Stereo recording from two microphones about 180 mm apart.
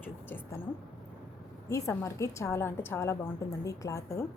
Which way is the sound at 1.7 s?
15° left (ahead or behind).